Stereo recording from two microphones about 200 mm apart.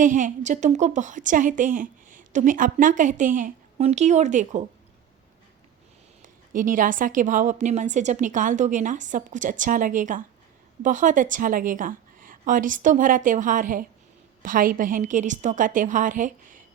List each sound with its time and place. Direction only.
0.0 s a woman's voice: 40° right (ahead or behind)
6.5 s a woman's voice: 40° right (ahead or behind)